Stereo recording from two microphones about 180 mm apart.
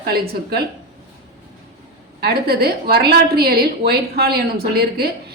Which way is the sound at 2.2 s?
60° right (ahead or behind).